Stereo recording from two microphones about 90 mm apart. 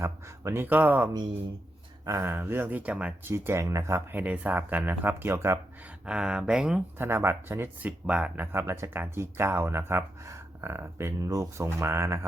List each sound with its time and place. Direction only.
0.0 s speech: 30° right (ahead or behind)
2.0 s speech: 30° right (ahead or behind); by 3.3 s 15° right (ahead or behind)
3.3 s speech: 30° right (ahead or behind)
6.1 s speech: 10° right (ahead or behind)
7.0 s speech: 25° right (ahead or behind)
8.5 s speech: 30° right (ahead or behind)
11.2 s speech: 40° right (ahead or behind)